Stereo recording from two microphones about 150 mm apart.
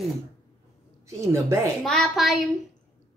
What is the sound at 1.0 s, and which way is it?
Speech, 20° right (ahead or behind).